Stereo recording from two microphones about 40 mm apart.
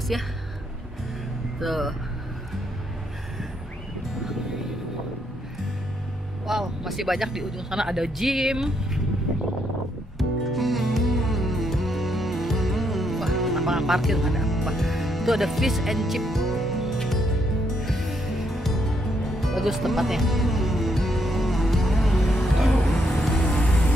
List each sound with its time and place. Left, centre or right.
1.6 s speech: centre
6.4 s speech: centre
10.1 s music: centre
23.3 s vehicle: left